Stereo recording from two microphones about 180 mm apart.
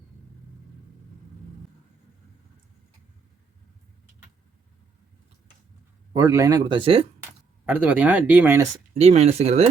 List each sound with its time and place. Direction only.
6.1 s speech: 20° right (ahead or behind)
7.2 s speech: 10° right (ahead or behind)
9.0 s speech: 35° right (ahead or behind)